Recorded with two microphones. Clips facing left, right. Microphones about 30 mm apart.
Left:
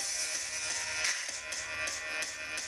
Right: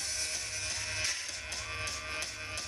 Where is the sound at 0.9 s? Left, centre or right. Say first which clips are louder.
Left 2 dB; centre.